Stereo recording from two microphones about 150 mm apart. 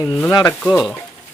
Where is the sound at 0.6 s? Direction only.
Centre (ahead or behind).